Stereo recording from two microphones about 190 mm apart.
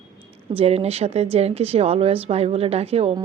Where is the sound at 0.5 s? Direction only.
35° right (ahead or behind).